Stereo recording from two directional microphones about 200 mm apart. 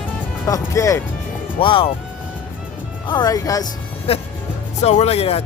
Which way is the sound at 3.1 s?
20° left (ahead or behind).